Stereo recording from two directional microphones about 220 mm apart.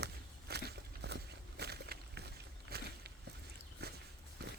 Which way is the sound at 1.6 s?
45° right (ahead or behind).